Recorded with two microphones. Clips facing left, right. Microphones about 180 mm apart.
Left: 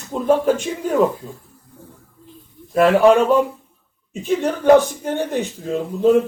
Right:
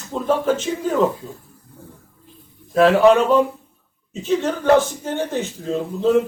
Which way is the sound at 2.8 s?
10° left (ahead or behind).